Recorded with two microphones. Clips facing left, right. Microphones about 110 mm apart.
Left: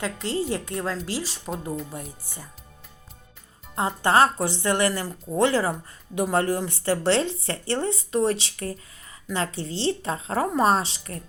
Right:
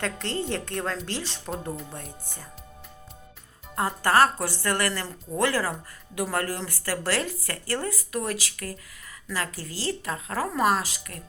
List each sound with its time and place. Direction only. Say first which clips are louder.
0.0 s a woman's voice: left 3 dB; 5° left (ahead or behind)
3.8 s speech: left 1 dB; 20° left (ahead or behind)